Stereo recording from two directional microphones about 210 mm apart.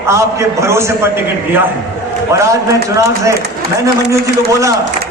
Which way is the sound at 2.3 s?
15° right (ahead or behind).